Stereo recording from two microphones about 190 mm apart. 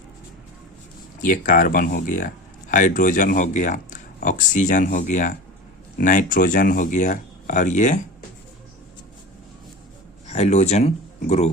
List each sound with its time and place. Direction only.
1.2 s speech: 45° left (ahead or behind)
10.2 s speech: 35° left (ahead or behind)